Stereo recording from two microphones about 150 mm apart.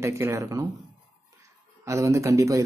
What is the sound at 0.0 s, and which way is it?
Speech, 20° right (ahead or behind).